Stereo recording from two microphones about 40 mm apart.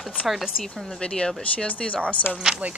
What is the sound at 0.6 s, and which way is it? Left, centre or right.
Speech, centre.